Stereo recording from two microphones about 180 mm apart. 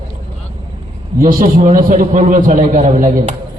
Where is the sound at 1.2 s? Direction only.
45° right (ahead or behind).